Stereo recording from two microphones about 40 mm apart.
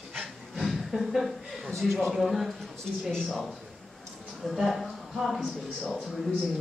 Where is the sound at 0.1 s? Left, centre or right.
Centre.